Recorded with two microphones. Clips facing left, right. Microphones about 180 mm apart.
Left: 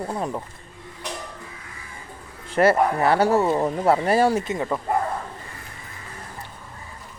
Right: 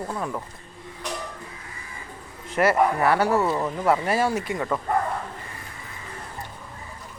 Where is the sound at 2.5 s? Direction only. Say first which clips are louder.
Left 2 dB; 30° left (ahead or behind).